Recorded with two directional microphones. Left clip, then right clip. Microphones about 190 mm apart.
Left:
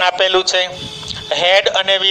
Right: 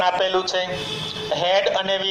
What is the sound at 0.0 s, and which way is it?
A man's voice, 60° left (ahead or behind).